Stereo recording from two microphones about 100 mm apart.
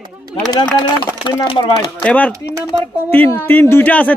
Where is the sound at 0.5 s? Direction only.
45° left (ahead or behind).